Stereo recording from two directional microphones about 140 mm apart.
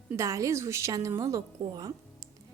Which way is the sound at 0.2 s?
20° right (ahead or behind).